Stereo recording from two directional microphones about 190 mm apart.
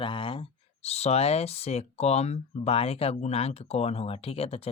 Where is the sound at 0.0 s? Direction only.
25° left (ahead or behind).